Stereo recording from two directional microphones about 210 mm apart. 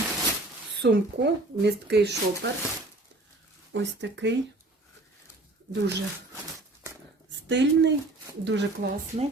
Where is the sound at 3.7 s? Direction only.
55° right (ahead or behind).